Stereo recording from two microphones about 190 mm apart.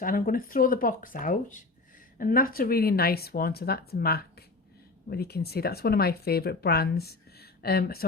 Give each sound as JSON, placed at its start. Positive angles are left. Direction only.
{"t": 0.0, "sound": "speech", "side_deg": 45}